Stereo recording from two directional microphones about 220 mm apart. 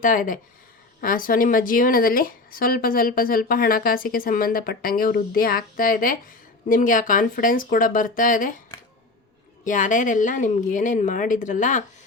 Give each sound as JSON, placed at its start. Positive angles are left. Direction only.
{"t": 0.0, "sound": "a woman's voice", "side_deg": 40}
{"t": 9.6, "sound": "a woman's voice", "side_deg": 35}